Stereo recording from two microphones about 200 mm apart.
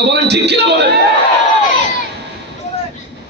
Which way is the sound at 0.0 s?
55° right (ahead or behind).